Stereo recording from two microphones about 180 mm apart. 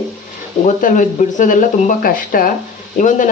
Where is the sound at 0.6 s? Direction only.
45° left (ahead or behind).